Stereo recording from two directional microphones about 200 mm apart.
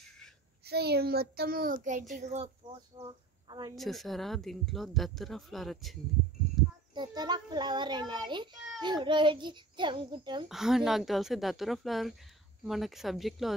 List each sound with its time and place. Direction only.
0.7 s a child's voice: 55° right (ahead or behind)
2.6 s a child's voice: 20° right (ahead or behind)
3.7 s speech: centre (ahead or behind)
6.6 s a sound: centre (ahead or behind)
6.9 s a child's voice: 20° right (ahead or behind)
10.5 s speech: centre (ahead or behind)